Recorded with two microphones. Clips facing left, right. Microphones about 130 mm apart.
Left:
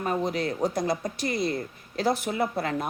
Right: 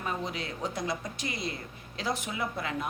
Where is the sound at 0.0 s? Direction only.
45° left (ahead or behind).